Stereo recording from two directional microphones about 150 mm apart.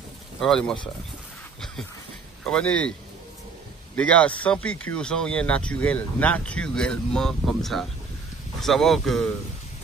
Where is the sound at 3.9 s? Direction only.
10° left (ahead or behind).